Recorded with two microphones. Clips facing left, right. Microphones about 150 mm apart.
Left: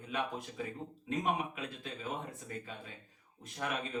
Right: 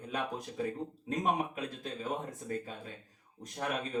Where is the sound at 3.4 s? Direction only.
40° right (ahead or behind).